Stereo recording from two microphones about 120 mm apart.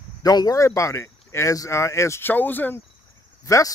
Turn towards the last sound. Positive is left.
turn(degrees=25)  # may be behind; listen again after turning